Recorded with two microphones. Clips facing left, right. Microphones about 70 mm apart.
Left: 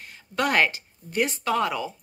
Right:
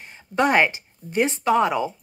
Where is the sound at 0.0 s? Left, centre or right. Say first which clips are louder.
Right 5 dB; right.